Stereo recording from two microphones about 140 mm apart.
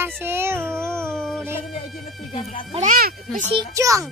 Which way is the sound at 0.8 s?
20° right (ahead or behind).